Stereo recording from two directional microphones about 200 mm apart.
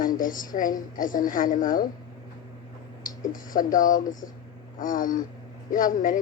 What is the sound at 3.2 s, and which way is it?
A woman's voice, 40° left (ahead or behind).